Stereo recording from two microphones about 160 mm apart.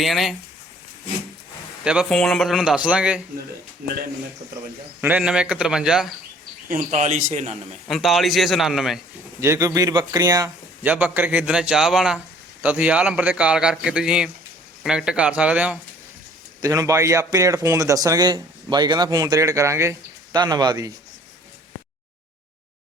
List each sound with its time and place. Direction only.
0.0 s a man's voice: centre (ahead or behind)
1.8 s a man's voice: 5° right (ahead or behind)
4.9 s a man's voice: 10° right (ahead or behind)
6.7 s a man's voice: 50° right (ahead or behind)
7.9 s a man's voice: centre (ahead or behind)
9.4 s speech: 20° right (ahead or behind)
10.8 s a man's voice: 10° right (ahead or behind)
16.6 s speech: 20° right (ahead or behind)